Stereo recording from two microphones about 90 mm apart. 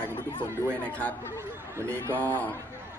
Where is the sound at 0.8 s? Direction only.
15° left (ahead or behind).